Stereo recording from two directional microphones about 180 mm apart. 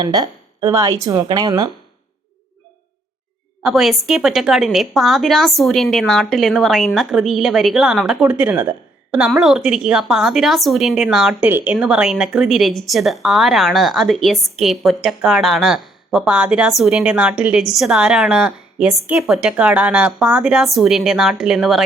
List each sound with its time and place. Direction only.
0.0 s speech: 20° right (ahead or behind)
3.6 s a woman's voice: centre (ahead or behind)